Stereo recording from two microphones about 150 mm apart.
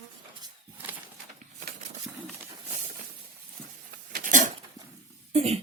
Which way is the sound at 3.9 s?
65° right (ahead or behind).